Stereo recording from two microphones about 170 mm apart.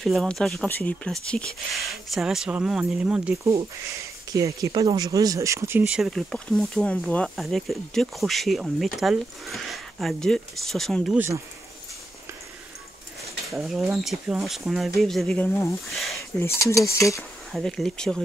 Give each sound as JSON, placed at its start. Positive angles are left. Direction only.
{"t": 0.0, "sound": "speech", "side_deg": 0}
{"t": 4.3, "sound": "speech", "side_deg": -20}
{"t": 11.1, "sound": "speech", "side_deg": -15}
{"t": 13.5, "sound": "speech", "side_deg": 0}
{"t": 16.3, "sound": "speech", "side_deg": 15}
{"t": 17.5, "sound": "speech", "side_deg": 0}